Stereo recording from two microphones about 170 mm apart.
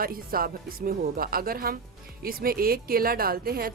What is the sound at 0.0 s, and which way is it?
Speech, 60° right (ahead or behind).